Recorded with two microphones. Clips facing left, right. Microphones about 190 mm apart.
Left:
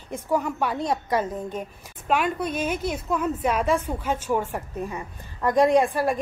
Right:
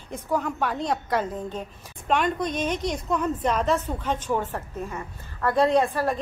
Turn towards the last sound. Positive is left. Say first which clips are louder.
# left 2 dB
turn(degrees=10)  # may be behind; listen again after turning